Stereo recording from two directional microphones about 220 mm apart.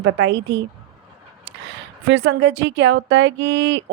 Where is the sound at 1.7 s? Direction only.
55° right (ahead or behind).